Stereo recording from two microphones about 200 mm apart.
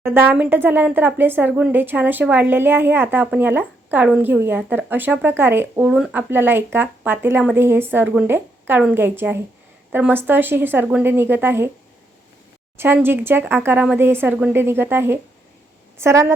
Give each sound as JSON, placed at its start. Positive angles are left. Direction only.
{"t": 0.0, "sound": "speech", "side_deg": -10}
{"t": 12.7, "sound": "speech", "side_deg": -10}